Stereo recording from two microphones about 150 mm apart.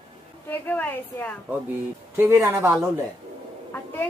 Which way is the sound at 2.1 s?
15° right (ahead or behind).